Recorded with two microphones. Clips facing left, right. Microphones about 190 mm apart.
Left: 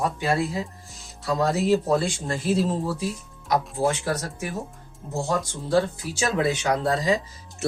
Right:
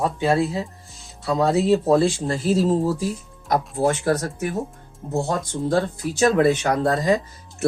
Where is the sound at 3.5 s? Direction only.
50° right (ahead or behind).